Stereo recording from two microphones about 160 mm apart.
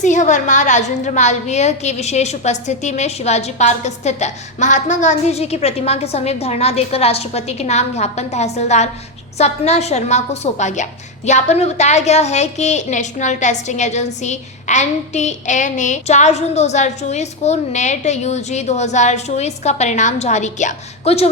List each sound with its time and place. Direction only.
0.0 s a woman's voice: 50° left (ahead or behind)